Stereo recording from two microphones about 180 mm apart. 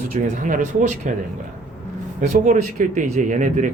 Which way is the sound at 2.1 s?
40° right (ahead or behind).